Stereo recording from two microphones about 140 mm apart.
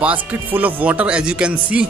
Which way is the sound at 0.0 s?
10° right (ahead or behind).